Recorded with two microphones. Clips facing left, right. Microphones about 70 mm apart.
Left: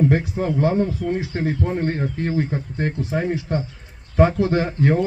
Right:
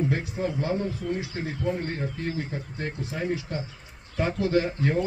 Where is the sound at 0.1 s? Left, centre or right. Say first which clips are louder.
Left 7 dB; left.